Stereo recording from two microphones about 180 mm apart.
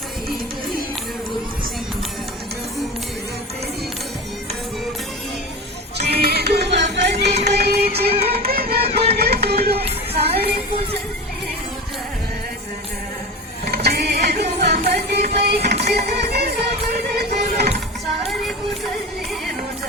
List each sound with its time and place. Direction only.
6.0 s music: 60° right (ahead or behind)
7.3 s music: 35° right (ahead or behind)
7.5 s music: 65° right (ahead or behind)
8.0 s music: 35° right (ahead or behind)
8.4 s music: 60° right (ahead or behind)
10.2 s a sound: 35° right (ahead or behind)
13.7 s mechanisms: 65° right (ahead or behind)
14.6 s music: 65° right (ahead or behind)
18.3 s music: centre (ahead or behind)